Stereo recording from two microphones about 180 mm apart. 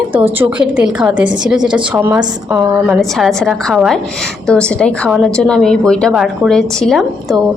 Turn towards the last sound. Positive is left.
turn(degrees=0)  # may be behind; listen again after turning